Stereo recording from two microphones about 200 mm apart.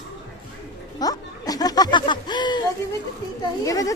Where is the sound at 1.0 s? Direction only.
20° left (ahead or behind).